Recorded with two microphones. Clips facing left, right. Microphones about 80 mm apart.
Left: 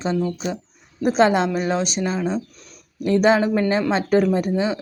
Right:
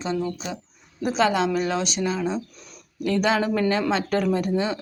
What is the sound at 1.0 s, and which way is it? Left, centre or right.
Speech, left.